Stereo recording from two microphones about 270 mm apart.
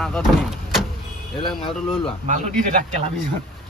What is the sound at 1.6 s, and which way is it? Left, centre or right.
Speech, centre.